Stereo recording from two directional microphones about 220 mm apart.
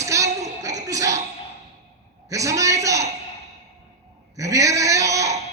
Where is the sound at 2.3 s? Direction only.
15° right (ahead or behind).